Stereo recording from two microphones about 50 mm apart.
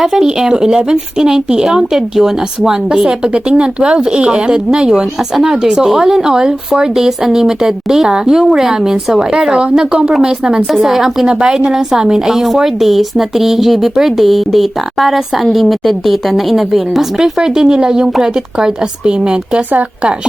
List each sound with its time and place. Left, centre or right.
0.0 s speech: centre
3.3 s speech: centre
10.7 s a woman's voice: centre